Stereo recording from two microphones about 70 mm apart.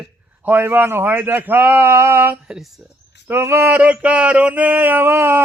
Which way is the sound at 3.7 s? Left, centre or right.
Right.